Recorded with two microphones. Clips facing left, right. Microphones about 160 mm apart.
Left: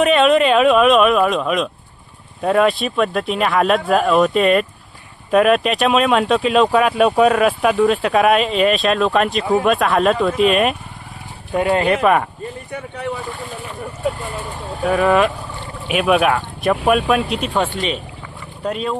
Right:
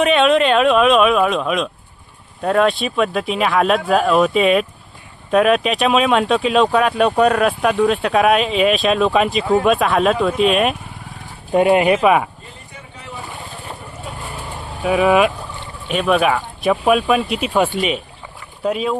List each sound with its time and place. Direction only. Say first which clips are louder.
0.0 s speech: left 1 dB; centre (ahead or behind)
11.5 s speech: right 3 dB; 20° right (ahead or behind)
12.0 s speech: right 1 dB; 5° right (ahead or behind)
14.8 s speech: right 1 dB; 5° right (ahead or behind)
15.9 s speech: left 1 dB; 5° left (ahead or behind)